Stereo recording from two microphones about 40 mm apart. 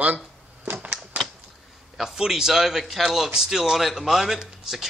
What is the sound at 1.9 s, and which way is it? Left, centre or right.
A man's voice, centre.